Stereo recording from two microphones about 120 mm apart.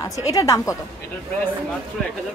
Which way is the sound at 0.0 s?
30° left (ahead or behind).